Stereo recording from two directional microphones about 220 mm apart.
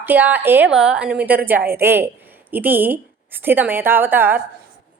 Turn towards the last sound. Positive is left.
turn(degrees=-10)  # may be behind; listen again after turning